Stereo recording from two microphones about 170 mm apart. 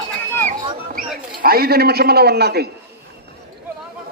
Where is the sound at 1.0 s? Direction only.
60° right (ahead or behind).